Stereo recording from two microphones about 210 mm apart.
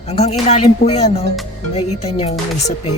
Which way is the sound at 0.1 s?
30° left (ahead or behind).